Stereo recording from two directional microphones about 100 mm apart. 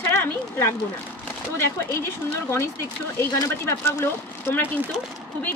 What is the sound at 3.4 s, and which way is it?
A woman's voice, 25° left (ahead or behind).